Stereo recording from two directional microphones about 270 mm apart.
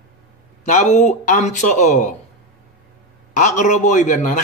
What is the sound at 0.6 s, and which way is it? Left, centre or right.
A man's voice, left.